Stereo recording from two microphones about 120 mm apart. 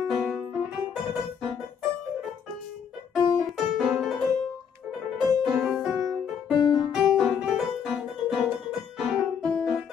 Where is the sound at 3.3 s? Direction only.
Centre (ahead or behind).